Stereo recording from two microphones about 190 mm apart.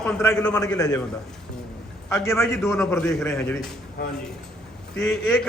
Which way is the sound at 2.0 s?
15° left (ahead or behind).